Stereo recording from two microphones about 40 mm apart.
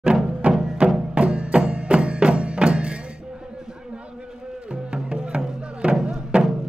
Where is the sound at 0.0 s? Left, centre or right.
Right.